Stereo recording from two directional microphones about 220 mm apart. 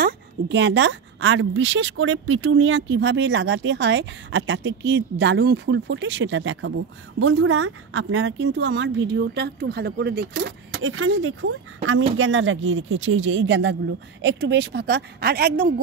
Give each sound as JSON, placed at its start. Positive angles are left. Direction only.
{"t": 0.0, "sound": "a woman's voice", "side_deg": -50}